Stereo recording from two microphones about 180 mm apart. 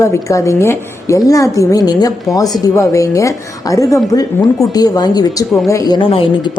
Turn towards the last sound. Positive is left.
turn(degrees=30)  # may be behind; listen again after turning